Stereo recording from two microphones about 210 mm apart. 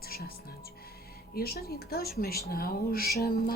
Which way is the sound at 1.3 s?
45° left (ahead or behind).